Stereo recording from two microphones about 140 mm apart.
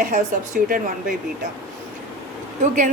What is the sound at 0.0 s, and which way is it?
Speech, 75° right (ahead or behind).